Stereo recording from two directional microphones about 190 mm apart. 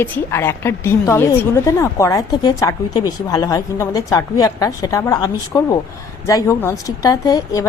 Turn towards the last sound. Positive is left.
turn(degrees=20)  # may be behind; listen again after turning